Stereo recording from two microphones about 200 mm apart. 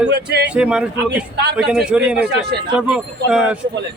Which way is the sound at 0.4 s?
5° right (ahead or behind).